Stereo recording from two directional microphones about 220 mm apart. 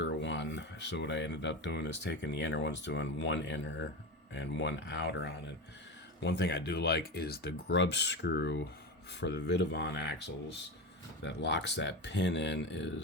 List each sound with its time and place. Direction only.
0.0 s speech: 55° left (ahead or behind)